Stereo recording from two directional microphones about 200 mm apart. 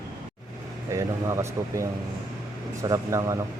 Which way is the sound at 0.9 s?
15° right (ahead or behind).